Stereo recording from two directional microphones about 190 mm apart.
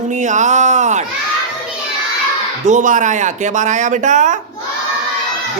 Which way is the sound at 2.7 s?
40° right (ahead or behind).